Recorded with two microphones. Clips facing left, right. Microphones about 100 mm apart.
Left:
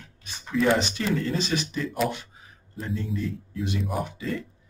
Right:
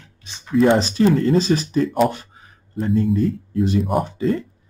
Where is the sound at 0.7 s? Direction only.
35° right (ahead or behind).